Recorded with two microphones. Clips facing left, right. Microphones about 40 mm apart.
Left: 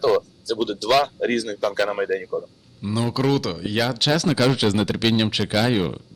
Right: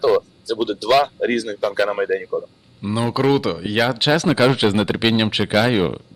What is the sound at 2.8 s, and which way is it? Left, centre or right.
Speech, right.